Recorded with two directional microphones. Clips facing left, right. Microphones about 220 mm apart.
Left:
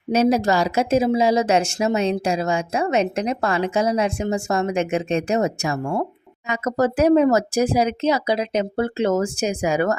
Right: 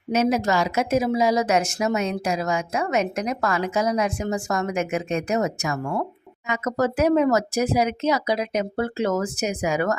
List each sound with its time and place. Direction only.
0.1 s speech: 35° left (ahead or behind)